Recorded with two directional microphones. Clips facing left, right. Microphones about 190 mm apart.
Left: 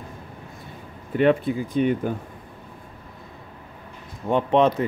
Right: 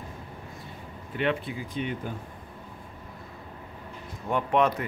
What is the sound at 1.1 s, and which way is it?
Speech, 45° left (ahead or behind).